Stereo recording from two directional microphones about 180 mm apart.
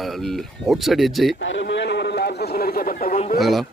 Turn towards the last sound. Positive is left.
turn(degrees=0)  # may be behind; listen again after turning